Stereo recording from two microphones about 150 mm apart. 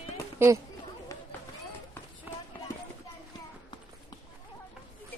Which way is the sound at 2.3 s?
10° right (ahead or behind).